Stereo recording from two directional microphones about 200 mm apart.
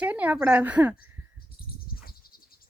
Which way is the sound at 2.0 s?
50° left (ahead or behind).